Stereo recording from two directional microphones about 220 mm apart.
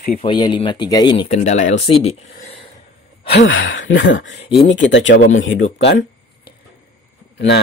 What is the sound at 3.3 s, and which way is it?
A man's voice, 60° left (ahead or behind).